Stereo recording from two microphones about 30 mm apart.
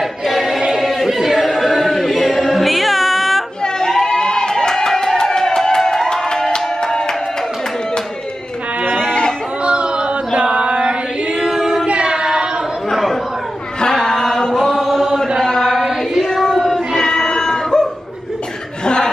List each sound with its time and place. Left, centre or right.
0.3 s choir: centre
1.1 s a capella: centre
1.8 s choir: centre
4.0 s a sound: left
6.5 s music: left
9.7 s chant: right
11.5 s child singing: centre
12.0 s child singing: right
14.9 s chant: centre
15.4 s chant: centre
16.9 s cat: centre
17.3 s dog: left